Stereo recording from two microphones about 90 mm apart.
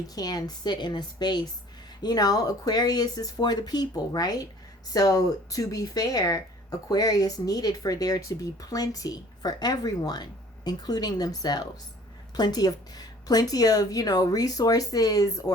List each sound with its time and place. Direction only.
0.1 s speech: 45° left (ahead or behind)